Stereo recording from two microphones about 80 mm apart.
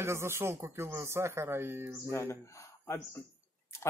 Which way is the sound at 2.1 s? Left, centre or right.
Left.